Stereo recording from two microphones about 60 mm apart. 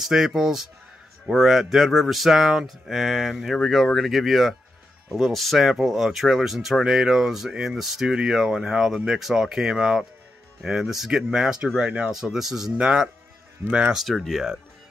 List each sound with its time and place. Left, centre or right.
0.0 s speech: centre
12.1 s speech: centre
13.9 s speech: centre